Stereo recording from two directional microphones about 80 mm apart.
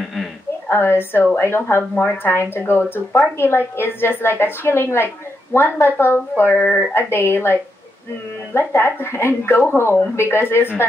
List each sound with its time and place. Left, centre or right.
0.7 s a woman's voice: left